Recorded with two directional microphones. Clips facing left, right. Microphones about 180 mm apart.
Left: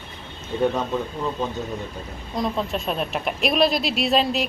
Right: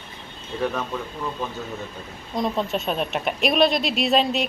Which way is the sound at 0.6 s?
20° left (ahead or behind).